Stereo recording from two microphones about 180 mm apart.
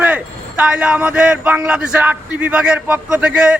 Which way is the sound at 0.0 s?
5° right (ahead or behind).